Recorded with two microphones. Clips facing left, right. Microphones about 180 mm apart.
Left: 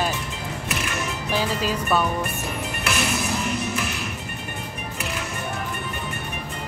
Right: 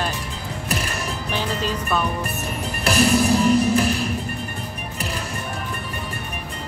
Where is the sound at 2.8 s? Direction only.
35° right (ahead or behind).